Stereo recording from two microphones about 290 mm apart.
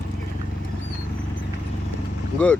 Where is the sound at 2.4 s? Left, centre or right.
Centre.